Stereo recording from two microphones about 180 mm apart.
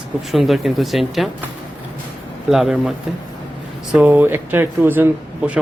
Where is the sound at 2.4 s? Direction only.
Centre (ahead or behind).